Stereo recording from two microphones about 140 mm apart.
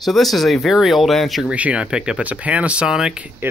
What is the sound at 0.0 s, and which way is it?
Speech, centre (ahead or behind).